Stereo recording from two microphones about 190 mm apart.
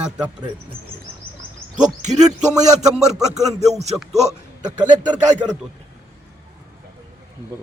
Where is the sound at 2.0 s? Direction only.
40° right (ahead or behind).